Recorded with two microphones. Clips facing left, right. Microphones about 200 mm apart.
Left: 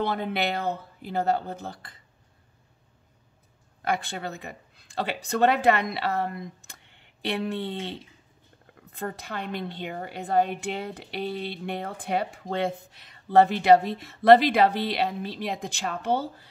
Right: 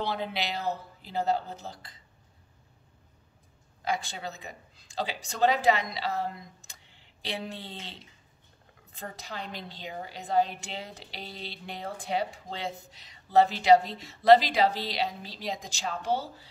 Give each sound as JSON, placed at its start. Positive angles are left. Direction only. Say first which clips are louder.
{"t": 0.0, "sound": "a woman's voice", "louder": "left 5 dB", "side_deg": 55}
{"t": 3.8, "sound": "a woman's voice", "louder": "left 3 dB", "side_deg": 55}